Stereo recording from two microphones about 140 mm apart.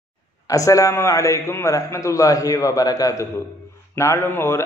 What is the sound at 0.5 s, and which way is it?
A man's voice, 25° left (ahead or behind).